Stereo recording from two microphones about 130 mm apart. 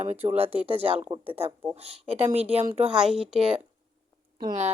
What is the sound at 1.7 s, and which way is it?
Speech, 50° right (ahead or behind).